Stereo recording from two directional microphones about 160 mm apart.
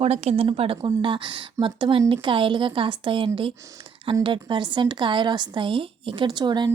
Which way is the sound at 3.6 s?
20° right (ahead or behind).